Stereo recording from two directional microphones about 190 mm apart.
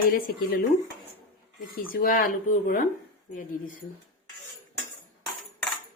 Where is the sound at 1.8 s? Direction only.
50° left (ahead or behind).